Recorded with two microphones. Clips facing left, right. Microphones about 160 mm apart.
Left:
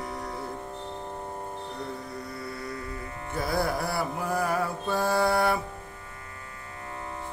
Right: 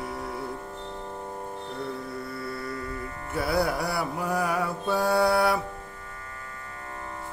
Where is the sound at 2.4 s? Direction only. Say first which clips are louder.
Right 2 dB; 20° left (ahead or behind).